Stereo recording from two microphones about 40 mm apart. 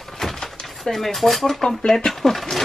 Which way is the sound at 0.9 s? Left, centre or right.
Centre.